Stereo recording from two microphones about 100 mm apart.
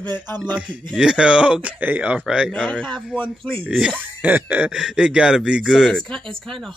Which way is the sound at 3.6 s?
Centre (ahead or behind).